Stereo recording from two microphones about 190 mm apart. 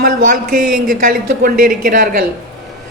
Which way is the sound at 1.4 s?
50° right (ahead or behind).